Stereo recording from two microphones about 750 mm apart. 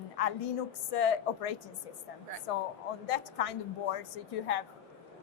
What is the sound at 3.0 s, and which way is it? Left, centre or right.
A woman's voice, left.